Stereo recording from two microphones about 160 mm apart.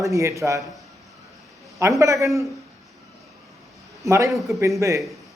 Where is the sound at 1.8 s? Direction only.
20° right (ahead or behind).